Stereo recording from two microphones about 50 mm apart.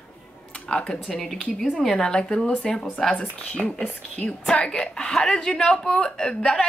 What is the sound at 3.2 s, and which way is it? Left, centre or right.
Speech, left.